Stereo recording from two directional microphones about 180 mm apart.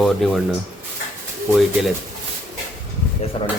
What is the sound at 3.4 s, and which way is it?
Speech, 30° left (ahead or behind).